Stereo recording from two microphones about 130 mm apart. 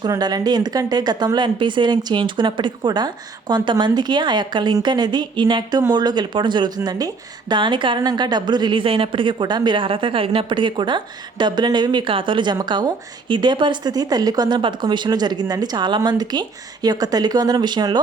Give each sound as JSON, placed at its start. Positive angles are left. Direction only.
{"t": 0.1, "sound": "a woman's voice", "side_deg": -30}